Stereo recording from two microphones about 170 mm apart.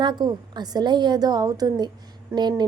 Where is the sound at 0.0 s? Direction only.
25° right (ahead or behind).